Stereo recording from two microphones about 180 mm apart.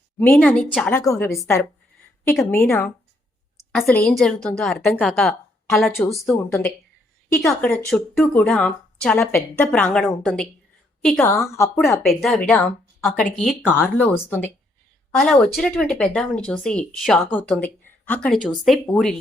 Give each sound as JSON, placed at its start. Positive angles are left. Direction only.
{"t": 0.2, "sound": "speech", "side_deg": 10}
{"t": 0.9, "sound": "a woman's voice", "side_deg": 15}
{"t": 7.4, "sound": "a woman's voice", "side_deg": 5}
{"t": 11.3, "sound": "speech", "side_deg": 15}
{"t": 12.0, "sound": "speech", "side_deg": 0}
{"t": 13.7, "sound": "speech", "side_deg": 10}